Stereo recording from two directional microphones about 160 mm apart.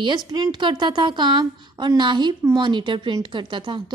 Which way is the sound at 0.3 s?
30° right (ahead or behind).